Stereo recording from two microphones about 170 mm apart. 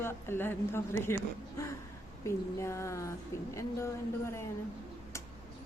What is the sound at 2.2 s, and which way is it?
Speech, 15° left (ahead or behind).